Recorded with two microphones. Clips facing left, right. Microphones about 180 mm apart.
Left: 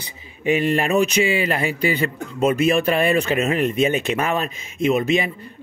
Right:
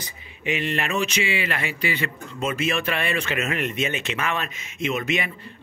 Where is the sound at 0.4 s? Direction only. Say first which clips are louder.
Left 7 dB; 40° left (ahead or behind).